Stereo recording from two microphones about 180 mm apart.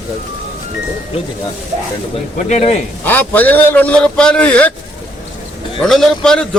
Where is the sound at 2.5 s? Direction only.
35° left (ahead or behind).